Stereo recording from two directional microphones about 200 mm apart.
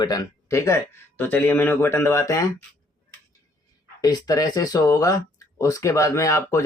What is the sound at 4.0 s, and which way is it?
Speech, 20° left (ahead or behind).